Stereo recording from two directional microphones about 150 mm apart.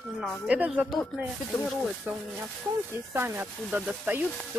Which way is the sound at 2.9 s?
15° right (ahead or behind).